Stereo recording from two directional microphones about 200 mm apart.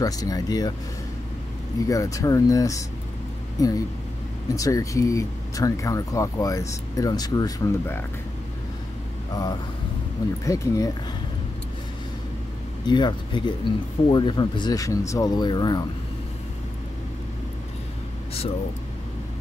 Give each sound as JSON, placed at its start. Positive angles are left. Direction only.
{"t": 0.0, "sound": "speech", "side_deg": 20}
{"t": 1.9, "sound": "speech", "side_deg": 15}
{"t": 9.3, "sound": "speech", "side_deg": 20}
{"t": 12.8, "sound": "speech", "side_deg": 20}